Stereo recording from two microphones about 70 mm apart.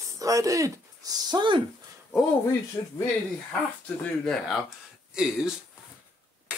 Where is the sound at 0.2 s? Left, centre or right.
Right.